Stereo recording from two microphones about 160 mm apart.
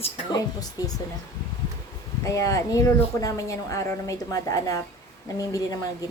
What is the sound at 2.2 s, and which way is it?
Speech, 20° left (ahead or behind).